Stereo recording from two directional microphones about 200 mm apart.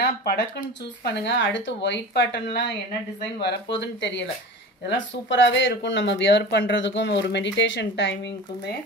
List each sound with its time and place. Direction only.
0.0 s speech: 55° left (ahead or behind)
3.7 s speech: 65° left (ahead or behind)